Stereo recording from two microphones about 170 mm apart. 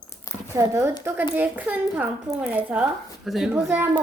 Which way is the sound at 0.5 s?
15° right (ahead or behind).